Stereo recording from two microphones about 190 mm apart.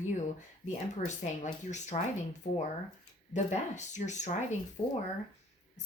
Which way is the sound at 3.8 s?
40° left (ahead or behind).